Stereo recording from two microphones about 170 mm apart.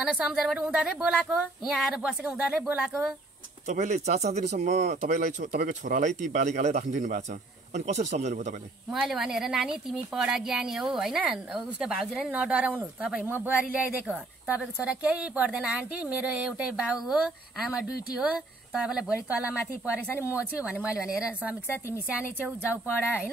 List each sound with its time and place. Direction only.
0.0 s a woman's voice: 5° right (ahead or behind)
3.6 s speech: 45° right (ahead or behind)
8.9 s a woman's voice: centre (ahead or behind)